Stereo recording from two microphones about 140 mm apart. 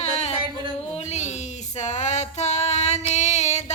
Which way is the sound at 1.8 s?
55° left (ahead or behind).